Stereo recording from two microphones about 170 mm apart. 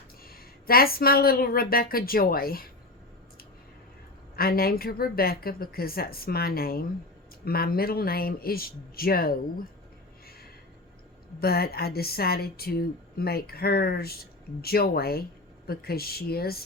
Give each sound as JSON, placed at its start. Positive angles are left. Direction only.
{"t": 0.3, "sound": "speech", "side_deg": 60}
{"t": 4.4, "sound": "speech", "side_deg": 60}
{"t": 11.3, "sound": "speech", "side_deg": 65}